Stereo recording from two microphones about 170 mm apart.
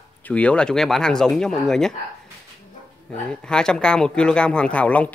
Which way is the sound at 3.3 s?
5° left (ahead or behind).